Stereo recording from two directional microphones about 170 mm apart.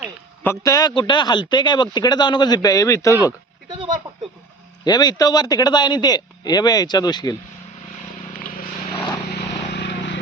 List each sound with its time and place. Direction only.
0.6 s speech: 20° left (ahead or behind)
3.7 s a sound: 30° right (ahead or behind)
4.9 s speech: 25° left (ahead or behind)
9.3 s vehicle: 85° left